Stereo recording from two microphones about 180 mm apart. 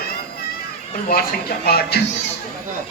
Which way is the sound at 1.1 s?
60° left (ahead or behind).